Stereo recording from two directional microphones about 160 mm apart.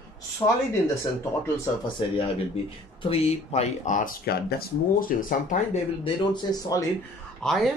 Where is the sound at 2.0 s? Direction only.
30° left (ahead or behind); by 5.8 s 55° left (ahead or behind).